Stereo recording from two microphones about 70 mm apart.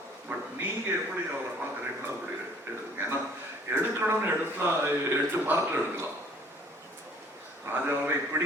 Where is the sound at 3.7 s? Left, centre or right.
Right.